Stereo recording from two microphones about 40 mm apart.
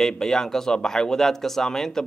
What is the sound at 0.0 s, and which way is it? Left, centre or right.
A man's voice, centre.